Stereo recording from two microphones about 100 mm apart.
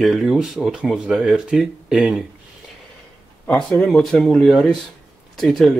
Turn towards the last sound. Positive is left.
turn(degrees=0)  # may be behind; listen again after turning